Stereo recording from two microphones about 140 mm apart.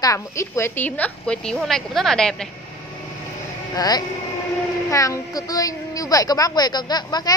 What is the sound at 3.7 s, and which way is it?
A woman's voice, 30° left (ahead or behind).